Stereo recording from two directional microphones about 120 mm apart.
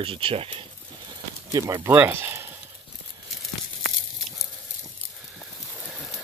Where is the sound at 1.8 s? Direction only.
15° right (ahead or behind).